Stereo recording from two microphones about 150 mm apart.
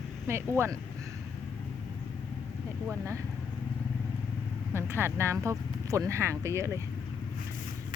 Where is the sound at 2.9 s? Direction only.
20° right (ahead or behind).